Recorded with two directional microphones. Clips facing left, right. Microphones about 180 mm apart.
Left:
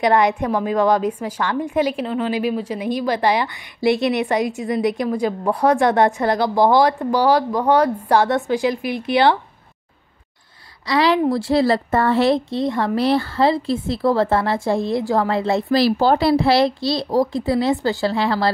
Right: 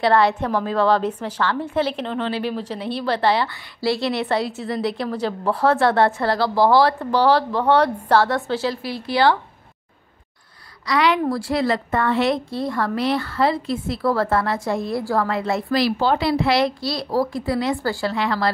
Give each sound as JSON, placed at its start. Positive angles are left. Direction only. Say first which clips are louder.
{"t": 0.0, "sound": "a woman's voice", "louder": "left 1 dB", "side_deg": 15}
{"t": 10.9, "sound": "a woman's voice", "louder": "left 3 dB", "side_deg": 30}